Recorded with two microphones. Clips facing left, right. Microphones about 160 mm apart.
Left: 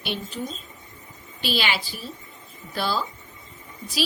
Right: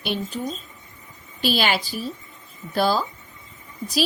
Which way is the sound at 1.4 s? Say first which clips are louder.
Right 4 dB; 45° right (ahead or behind).